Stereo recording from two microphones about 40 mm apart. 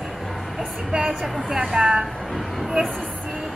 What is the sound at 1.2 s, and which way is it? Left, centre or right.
Speech, centre.